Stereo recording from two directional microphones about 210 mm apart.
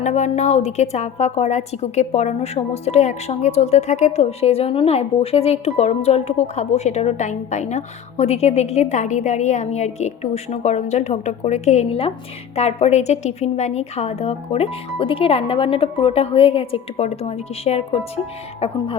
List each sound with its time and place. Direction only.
0.0 s a woman's voice: 35° left (ahead or behind)